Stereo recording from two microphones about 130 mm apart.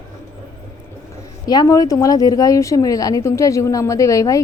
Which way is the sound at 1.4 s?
30° left (ahead or behind).